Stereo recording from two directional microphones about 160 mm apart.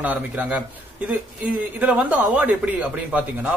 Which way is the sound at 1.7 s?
10° right (ahead or behind).